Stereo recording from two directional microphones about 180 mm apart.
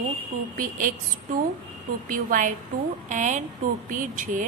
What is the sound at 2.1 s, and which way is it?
A woman's voice, 50° right (ahead or behind).